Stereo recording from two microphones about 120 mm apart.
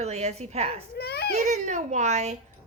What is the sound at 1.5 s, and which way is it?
Speech, 90° right.